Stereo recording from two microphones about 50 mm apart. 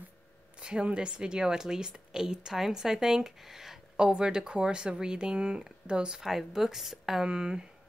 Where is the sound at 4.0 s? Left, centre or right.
Centre.